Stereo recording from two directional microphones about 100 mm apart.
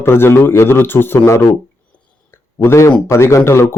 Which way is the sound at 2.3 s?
25° left (ahead or behind).